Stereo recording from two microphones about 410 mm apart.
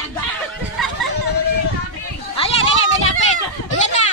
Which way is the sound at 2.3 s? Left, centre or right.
Centre.